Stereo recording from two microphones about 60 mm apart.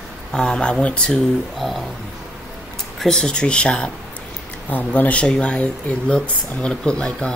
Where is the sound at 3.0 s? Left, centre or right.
Centre.